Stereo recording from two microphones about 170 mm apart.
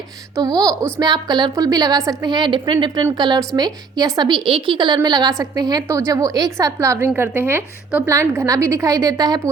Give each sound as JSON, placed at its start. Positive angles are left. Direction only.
{"t": 0.3, "sound": "a woman's voice", "side_deg": -20}